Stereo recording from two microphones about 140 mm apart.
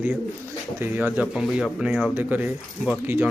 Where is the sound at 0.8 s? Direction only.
10° right (ahead or behind).